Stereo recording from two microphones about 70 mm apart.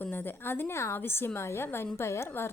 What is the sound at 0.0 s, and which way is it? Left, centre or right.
A woman's voice, left.